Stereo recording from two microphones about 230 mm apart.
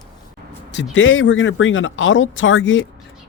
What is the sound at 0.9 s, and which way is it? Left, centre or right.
Speech, left.